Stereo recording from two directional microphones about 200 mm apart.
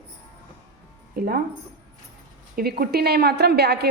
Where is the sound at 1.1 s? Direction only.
50° right (ahead or behind).